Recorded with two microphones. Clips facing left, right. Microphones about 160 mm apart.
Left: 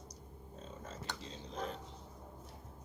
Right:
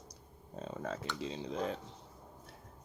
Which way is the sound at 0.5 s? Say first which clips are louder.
Right 9 dB; 70° right (ahead or behind).